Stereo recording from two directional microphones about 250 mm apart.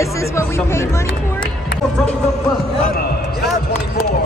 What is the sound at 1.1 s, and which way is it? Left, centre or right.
Speech, left.